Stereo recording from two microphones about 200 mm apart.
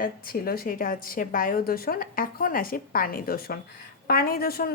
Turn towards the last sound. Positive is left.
turn(degrees=50)  # may be behind; listen again after turning